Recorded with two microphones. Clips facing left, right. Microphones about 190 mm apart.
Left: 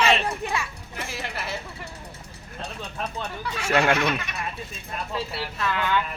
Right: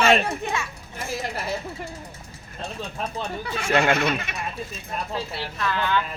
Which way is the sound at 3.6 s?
5° left (ahead or behind).